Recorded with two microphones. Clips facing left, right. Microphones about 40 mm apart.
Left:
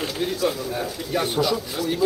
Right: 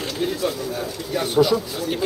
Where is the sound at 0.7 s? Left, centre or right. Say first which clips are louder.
Even; centre.